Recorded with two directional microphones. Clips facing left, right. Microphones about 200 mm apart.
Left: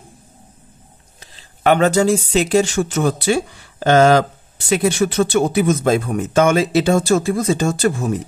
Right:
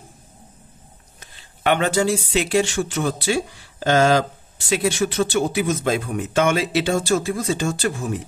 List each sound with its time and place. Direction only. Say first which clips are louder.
1.2 s speech: left 5 dB; 40° left (ahead or behind)
4.6 s speech: left 4 dB; 50° left (ahead or behind)